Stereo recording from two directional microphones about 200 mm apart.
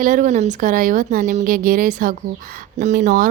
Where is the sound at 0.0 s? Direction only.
40° right (ahead or behind).